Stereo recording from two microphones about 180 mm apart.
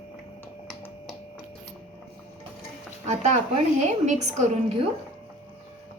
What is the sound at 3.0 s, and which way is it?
A woman's voice, 40° right (ahead or behind).